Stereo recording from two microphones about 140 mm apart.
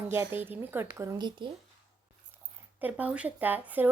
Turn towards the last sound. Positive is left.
turn(degrees=-15)  # may be behind; listen again after turning